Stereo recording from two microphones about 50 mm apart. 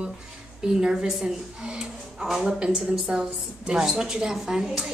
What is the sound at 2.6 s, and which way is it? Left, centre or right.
A woman's voice, centre.